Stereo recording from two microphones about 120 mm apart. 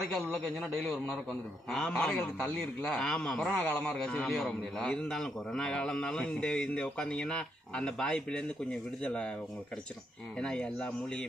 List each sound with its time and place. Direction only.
0.3 s a man's voice: centre (ahead or behind)
10.3 s a man's voice: 5° left (ahead or behind)